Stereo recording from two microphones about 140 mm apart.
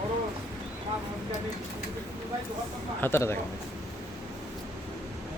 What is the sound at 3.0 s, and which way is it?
Speech, 15° left (ahead or behind).